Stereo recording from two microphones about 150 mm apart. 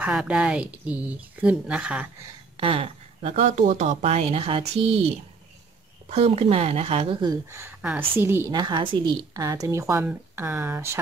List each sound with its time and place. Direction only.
0.0 s speech: 5° right (ahead or behind)
2.6 s speech: 40° right (ahead or behind)
7.2 s a woman's voice: 20° right (ahead or behind)
8.5 s a woman's voice: 30° right (ahead or behind)